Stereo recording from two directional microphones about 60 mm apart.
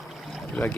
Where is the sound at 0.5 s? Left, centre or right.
Left.